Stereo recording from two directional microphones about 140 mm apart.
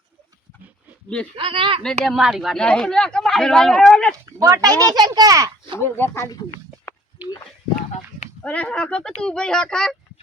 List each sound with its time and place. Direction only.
1.4 s speech: 40° right (ahead or behind)
2.0 s speech: centre (ahead or behind)
4.4 s a child's voice: 25° right (ahead or behind)
5.8 s speech: 20° left (ahead or behind)
6.9 s a sound: 15° left (ahead or behind)
8.4 s speech: 10° left (ahead or behind)